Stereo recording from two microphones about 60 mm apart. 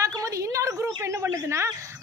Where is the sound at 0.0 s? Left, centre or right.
Right.